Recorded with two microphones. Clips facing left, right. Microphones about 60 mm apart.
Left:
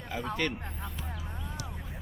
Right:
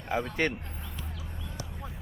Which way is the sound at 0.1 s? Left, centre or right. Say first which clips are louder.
Right 6 dB; right.